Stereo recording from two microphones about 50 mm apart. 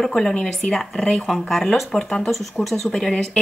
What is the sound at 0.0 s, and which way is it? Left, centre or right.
Speech, centre.